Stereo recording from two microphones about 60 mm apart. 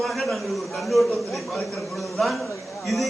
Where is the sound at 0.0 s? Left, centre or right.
Centre.